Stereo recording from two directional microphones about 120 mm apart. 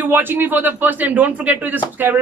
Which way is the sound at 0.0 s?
15° right (ahead or behind).